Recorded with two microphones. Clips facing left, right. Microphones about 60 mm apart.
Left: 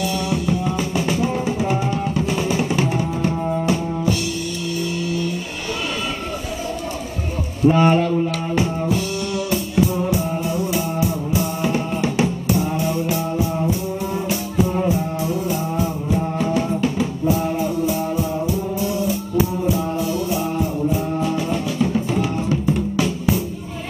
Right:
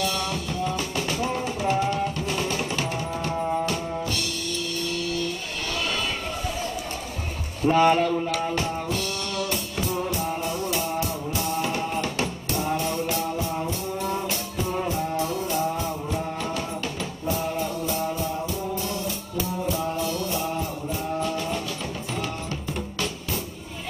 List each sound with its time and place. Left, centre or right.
0.0 s music: centre
7.6 s speech: left
8.5 s music: centre
18.9 s music: centre